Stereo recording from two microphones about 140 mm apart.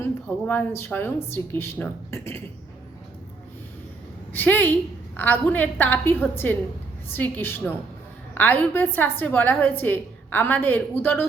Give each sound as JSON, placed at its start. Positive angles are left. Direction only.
{"t": 0.4, "sound": "a woman's voice", "side_deg": 15}
{"t": 4.3, "sound": "a woman's voice", "side_deg": 15}